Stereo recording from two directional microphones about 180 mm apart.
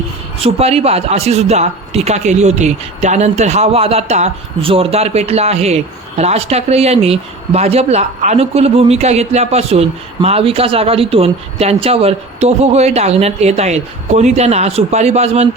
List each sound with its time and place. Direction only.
0.4 s speech: 35° right (ahead or behind)